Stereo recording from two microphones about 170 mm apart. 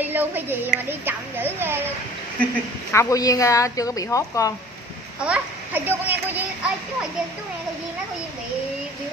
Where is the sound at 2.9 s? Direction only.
20° left (ahead or behind).